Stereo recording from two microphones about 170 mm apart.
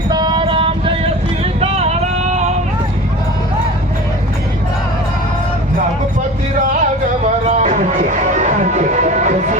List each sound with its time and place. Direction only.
0.1 s music: 25° right (ahead or behind)
1.6 s a sound: 40° right (ahead or behind)
7.3 s music: 45° right (ahead or behind)